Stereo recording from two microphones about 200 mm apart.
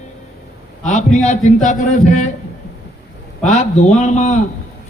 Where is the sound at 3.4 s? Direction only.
35° left (ahead or behind).